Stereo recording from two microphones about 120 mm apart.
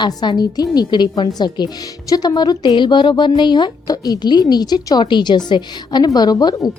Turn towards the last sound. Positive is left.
turn(degrees=35)  # may be behind; listen again after turning